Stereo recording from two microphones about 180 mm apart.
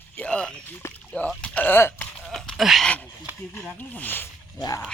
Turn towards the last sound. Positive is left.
turn(degrees=20)  # may be behind; listen again after turning